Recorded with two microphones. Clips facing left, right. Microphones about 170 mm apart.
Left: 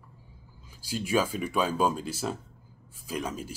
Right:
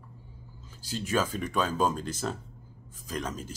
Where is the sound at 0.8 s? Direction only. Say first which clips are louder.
Left 2 dB; 10° left (ahead or behind).